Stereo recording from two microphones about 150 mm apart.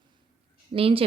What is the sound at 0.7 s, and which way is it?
Speech, 40° right (ahead or behind).